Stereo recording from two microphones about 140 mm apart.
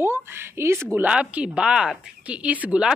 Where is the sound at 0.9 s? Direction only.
10° right (ahead or behind).